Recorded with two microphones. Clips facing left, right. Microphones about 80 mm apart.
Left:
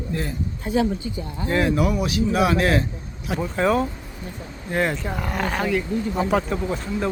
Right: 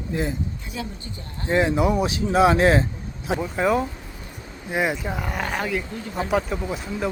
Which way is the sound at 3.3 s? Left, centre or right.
Centre.